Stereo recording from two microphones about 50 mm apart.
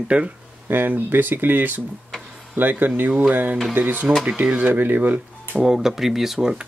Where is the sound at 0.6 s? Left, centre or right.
Right.